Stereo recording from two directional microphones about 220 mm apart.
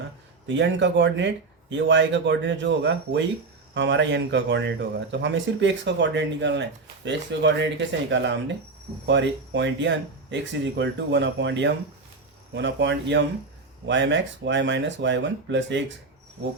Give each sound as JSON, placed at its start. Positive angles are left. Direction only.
{"t": 0.4, "sound": "speech", "side_deg": -55}